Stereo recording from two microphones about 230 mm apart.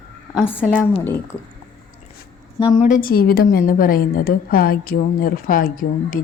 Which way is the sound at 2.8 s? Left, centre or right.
Left.